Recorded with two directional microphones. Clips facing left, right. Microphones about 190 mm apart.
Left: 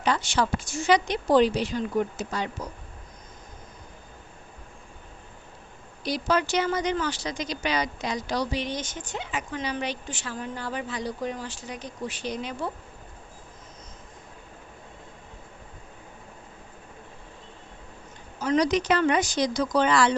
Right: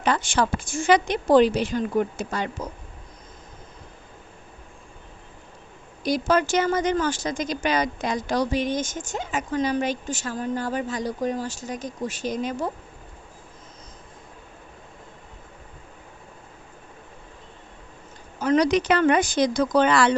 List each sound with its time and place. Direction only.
0.0 s speech: 50° right (ahead or behind)
6.0 s speech: 50° right (ahead or behind)
18.3 s speech: 55° right (ahead or behind)